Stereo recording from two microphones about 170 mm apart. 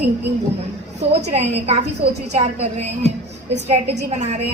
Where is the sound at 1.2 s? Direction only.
40° right (ahead or behind).